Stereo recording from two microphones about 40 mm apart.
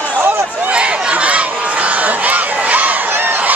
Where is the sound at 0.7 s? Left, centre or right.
Right.